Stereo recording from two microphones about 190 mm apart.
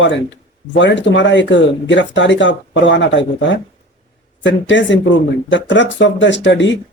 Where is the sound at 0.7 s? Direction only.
70° left (ahead or behind).